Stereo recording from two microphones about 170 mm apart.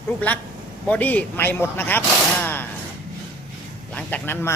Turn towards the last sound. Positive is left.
turn(degrees=10)  # may be behind; listen again after turning